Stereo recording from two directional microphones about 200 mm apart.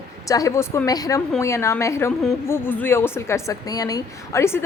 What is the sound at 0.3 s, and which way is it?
A woman's voice, 15° left (ahead or behind).